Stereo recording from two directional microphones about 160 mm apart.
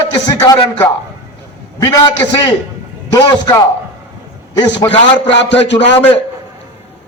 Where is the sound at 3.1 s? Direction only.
20° left (ahead or behind).